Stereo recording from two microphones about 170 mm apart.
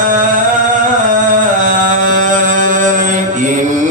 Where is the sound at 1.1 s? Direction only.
50° right (ahead or behind).